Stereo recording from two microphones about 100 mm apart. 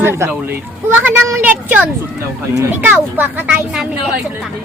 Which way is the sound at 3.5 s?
5° right (ahead or behind).